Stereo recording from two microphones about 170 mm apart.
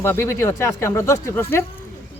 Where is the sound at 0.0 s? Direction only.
15° left (ahead or behind).